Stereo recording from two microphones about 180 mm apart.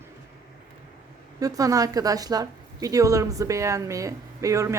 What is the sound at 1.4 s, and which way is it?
A woman's voice, 20° right (ahead or behind).